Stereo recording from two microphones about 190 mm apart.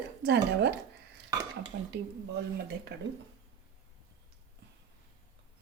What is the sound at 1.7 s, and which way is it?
Speech, 65° right (ahead or behind).